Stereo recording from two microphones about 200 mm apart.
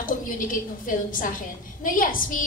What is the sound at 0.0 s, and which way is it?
A woman's voice, 40° left (ahead or behind).